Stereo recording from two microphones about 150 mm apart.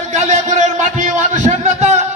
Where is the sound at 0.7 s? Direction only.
55° right (ahead or behind).